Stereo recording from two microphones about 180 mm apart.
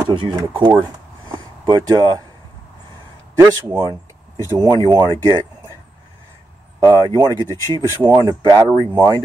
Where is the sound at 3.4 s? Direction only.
15° right (ahead or behind).